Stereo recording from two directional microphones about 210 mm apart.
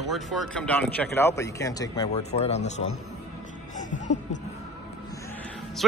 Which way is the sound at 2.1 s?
30° left (ahead or behind).